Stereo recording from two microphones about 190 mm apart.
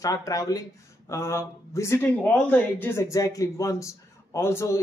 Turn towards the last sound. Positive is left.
turn(degrees=15)  # may be behind; listen again after turning